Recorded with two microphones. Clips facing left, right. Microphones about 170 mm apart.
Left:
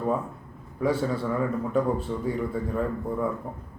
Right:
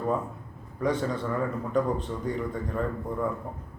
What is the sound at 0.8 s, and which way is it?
A man's voice, 5° left (ahead or behind).